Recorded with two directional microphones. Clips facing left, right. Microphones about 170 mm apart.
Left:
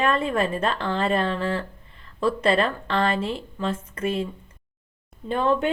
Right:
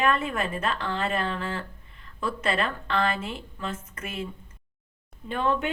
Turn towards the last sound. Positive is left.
turn(degrees=35)  # may be behind; listen again after turning